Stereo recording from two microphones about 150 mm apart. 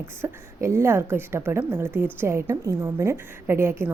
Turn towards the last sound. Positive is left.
turn(degrees=-15)  # may be behind; listen again after turning